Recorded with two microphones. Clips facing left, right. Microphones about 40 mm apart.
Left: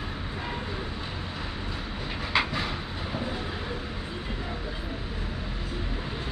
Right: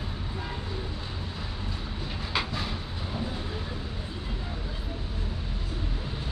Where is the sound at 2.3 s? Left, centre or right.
Left.